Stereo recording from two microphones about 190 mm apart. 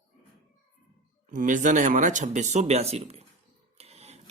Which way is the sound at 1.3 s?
45° right (ahead or behind).